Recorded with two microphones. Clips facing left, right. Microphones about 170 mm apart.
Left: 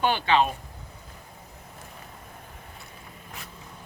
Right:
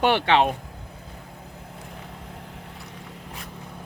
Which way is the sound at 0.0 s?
70° right (ahead or behind).